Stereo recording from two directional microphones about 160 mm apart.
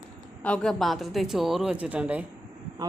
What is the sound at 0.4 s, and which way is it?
A man's voice, 5° left (ahead or behind).